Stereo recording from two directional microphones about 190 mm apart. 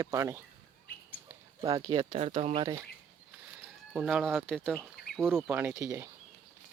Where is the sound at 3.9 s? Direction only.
5° right (ahead or behind).